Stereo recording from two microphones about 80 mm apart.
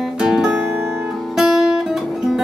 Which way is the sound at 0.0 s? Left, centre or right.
Centre.